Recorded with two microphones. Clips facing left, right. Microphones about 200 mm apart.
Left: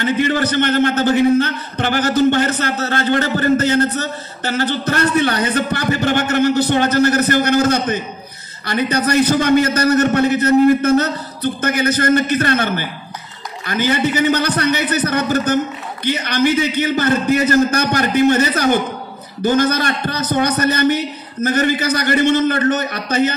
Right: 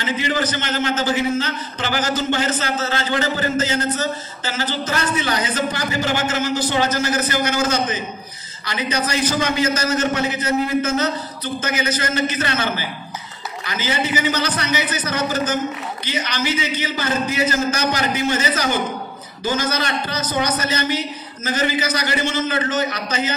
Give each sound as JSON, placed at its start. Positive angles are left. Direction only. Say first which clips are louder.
{"t": 0.0, "sound": "a man's voice", "louder": "left 5 dB", "side_deg": 55}